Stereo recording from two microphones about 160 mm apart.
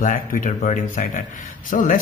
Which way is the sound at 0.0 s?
55° left (ahead or behind).